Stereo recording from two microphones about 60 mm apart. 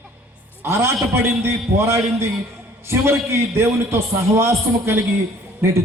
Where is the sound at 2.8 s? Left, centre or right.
Right.